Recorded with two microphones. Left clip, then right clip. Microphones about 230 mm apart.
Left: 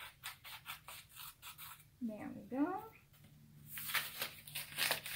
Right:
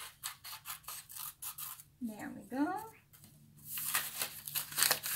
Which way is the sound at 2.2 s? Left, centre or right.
Centre.